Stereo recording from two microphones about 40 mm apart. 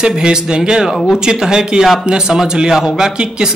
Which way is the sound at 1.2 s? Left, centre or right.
Centre.